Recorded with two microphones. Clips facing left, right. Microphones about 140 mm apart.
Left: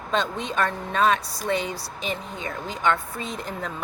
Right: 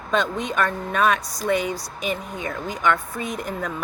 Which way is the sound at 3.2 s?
15° right (ahead or behind).